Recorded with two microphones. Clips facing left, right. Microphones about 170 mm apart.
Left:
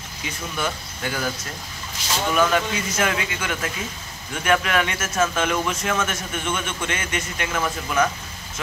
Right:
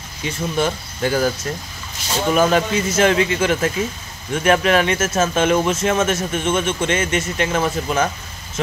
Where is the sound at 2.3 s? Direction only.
30° right (ahead or behind).